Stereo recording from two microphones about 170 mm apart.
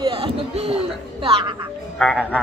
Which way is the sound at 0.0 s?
30° right (ahead or behind).